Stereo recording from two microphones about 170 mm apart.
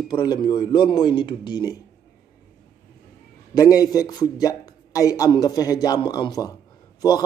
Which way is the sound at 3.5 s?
20° left (ahead or behind).